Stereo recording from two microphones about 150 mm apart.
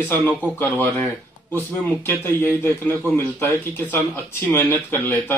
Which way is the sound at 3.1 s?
15° left (ahead or behind).